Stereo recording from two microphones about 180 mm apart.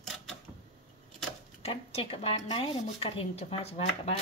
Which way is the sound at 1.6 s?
35° left (ahead or behind).